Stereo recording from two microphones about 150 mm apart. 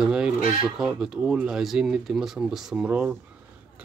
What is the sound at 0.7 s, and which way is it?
Speech, 5° right (ahead or behind).